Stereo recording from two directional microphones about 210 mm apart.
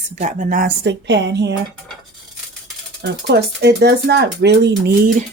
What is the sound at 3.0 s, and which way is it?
Speech, 50° right (ahead or behind).